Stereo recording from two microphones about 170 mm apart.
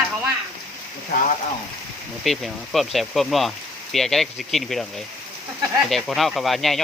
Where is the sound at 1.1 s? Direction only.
55° left (ahead or behind).